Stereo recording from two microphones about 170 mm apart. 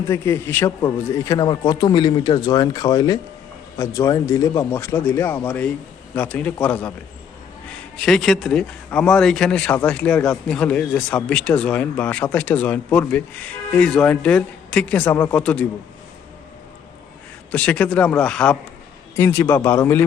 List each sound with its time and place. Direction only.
0.1 s a man's voice: 15° left (ahead or behind)
7.9 s speech: centre (ahead or behind)
17.5 s speech: 5° left (ahead or behind)